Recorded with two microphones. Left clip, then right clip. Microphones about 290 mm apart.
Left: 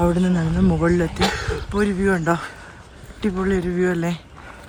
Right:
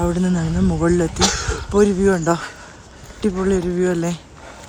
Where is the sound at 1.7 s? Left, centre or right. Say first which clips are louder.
Right 6 dB; centre.